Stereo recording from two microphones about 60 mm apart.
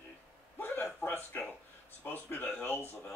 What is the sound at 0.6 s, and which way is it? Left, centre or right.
A man's voice, left.